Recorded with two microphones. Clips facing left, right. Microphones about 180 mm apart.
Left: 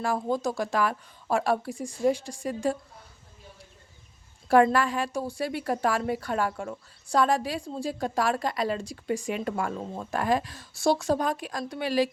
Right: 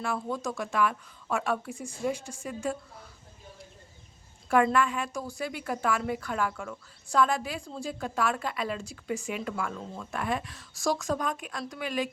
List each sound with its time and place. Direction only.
0.0 s a woman's voice: 35° left (ahead or behind)
4.6 s a woman's voice: 35° left (ahead or behind)